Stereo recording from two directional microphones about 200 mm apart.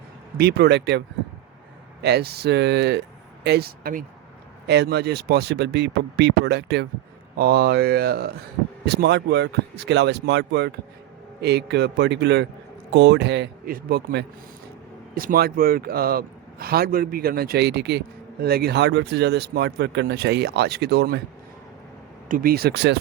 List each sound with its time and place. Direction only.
0.3 s a man's voice: 55° right (ahead or behind)
22.3 s a man's voice: 45° right (ahead or behind)